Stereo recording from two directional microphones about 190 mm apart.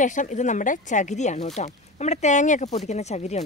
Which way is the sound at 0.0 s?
40° left (ahead or behind).